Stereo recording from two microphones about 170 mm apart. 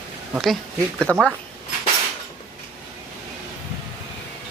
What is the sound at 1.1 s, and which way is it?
Speech, 5° left (ahead or behind).